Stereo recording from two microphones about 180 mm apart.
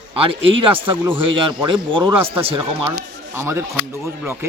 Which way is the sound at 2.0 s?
15° right (ahead or behind).